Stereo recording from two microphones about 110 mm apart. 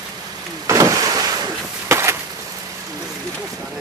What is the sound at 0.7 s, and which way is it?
Vehicle, 30° right (ahead or behind).